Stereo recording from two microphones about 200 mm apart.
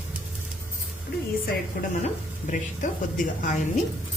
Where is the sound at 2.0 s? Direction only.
40° left (ahead or behind).